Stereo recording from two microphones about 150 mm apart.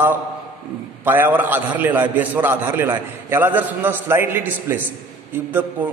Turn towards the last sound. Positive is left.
turn(degrees=-10)  # may be behind; listen again after turning